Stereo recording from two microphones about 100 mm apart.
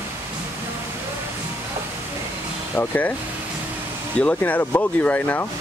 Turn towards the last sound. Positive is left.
turn(degrees=15)  # may be behind; listen again after turning